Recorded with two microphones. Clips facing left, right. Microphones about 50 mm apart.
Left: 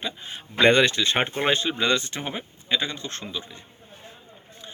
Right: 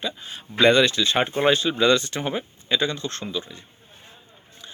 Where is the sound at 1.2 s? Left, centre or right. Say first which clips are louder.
Right 5 dB; left.